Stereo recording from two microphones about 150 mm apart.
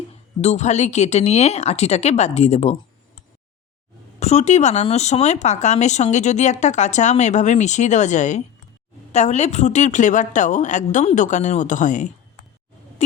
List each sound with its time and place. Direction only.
0.4 s speech: 50° left (ahead or behind)
4.2 s a woman's voice: 50° left (ahead or behind)